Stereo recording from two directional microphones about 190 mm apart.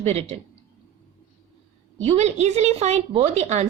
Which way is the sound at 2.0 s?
35° right (ahead or behind).